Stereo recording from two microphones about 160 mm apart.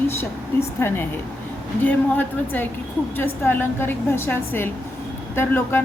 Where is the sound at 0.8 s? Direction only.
15° left (ahead or behind).